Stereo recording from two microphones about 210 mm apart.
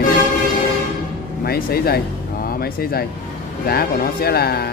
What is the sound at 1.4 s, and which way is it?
Speech, 45° left (ahead or behind).